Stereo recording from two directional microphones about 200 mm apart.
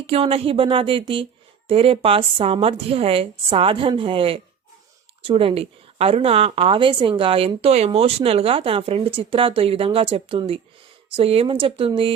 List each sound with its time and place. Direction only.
0.1 s a woman's voice: 30° right (ahead or behind)